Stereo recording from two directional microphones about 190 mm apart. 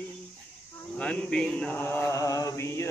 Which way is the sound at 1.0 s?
5° left (ahead or behind).